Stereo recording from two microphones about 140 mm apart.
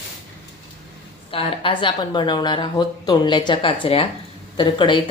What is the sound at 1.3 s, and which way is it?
Speech, 40° left (ahead or behind).